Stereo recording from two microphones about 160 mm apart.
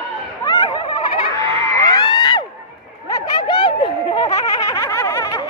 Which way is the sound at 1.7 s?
25° left (ahead or behind).